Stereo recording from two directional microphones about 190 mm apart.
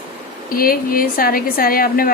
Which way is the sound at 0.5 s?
50° left (ahead or behind).